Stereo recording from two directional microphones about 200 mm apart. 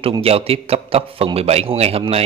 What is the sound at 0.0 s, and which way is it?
A man's voice, 30° right (ahead or behind).